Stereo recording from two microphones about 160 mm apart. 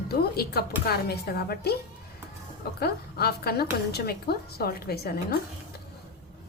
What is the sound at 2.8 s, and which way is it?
A woman's voice, 80° left.